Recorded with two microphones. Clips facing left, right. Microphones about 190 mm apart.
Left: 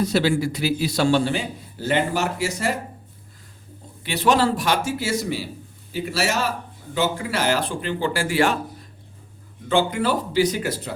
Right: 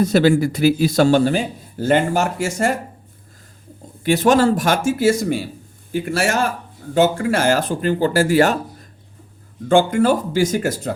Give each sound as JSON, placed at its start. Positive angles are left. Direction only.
{"t": 0.0, "sound": "a man's voice", "side_deg": -50}
{"t": 4.0, "sound": "a man's voice", "side_deg": -45}